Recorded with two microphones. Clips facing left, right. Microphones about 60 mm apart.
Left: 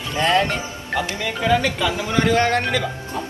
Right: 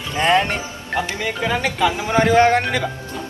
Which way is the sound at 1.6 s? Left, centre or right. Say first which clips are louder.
Right 2 dB; right.